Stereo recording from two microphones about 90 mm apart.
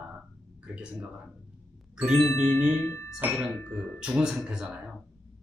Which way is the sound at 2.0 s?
Centre (ahead or behind).